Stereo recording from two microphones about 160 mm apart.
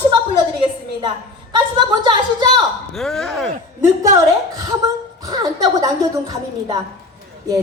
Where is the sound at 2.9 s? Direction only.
Centre (ahead or behind).